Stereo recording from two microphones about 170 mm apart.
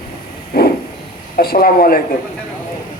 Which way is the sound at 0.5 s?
65° left (ahead or behind).